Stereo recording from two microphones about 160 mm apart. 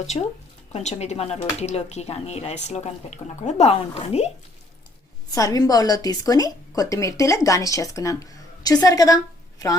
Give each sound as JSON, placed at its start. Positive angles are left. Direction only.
{"t": 0.1, "sound": "a woman's voice", "side_deg": 25}
{"t": 0.7, "sound": "speech", "side_deg": 45}
{"t": 5.3, "sound": "a woman's voice", "side_deg": 20}